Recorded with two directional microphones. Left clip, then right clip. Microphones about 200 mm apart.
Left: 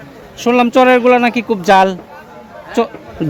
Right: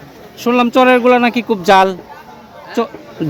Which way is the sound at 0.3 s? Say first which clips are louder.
Left 1 dB; centre (ahead or behind).